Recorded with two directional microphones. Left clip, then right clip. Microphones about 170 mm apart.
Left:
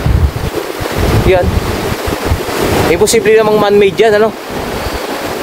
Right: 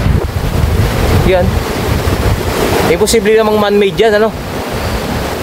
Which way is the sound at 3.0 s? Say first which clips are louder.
Left 3 dB; 5° left (ahead or behind).